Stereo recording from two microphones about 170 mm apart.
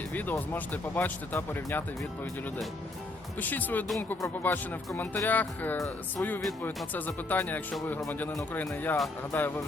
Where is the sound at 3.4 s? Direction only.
10° left (ahead or behind).